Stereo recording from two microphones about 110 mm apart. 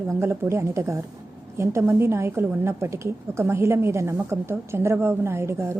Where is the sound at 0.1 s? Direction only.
20° right (ahead or behind).